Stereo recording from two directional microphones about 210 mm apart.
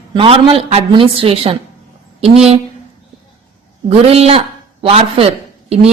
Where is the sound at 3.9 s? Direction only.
30° right (ahead or behind).